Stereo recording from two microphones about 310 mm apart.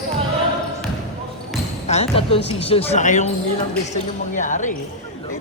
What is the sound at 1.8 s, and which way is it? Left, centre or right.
Speech, centre.